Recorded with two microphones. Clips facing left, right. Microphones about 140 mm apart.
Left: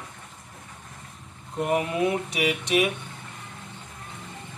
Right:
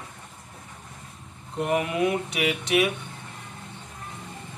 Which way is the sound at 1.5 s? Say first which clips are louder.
Even; 15° left (ahead or behind).